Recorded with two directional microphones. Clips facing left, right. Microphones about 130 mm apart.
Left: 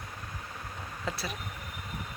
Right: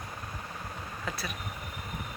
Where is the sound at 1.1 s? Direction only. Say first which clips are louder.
Left 2 dB; 25° left (ahead or behind).